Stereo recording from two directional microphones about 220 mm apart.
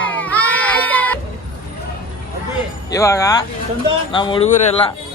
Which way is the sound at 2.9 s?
15° left (ahead or behind).